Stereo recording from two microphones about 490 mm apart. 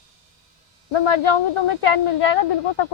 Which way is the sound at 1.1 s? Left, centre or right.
Left.